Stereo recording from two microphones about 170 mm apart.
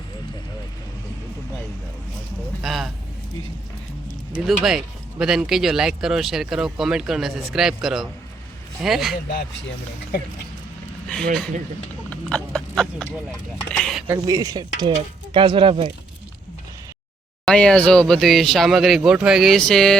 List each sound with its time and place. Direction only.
2.6 s a sound: centre (ahead or behind)
4.4 s speech: centre (ahead or behind)
12.1 s a sound: 5° left (ahead or behind)
13.7 s speech: 5° left (ahead or behind)
14.1 s speech: 20° right (ahead or behind)
17.4 s speech: 5° left (ahead or behind)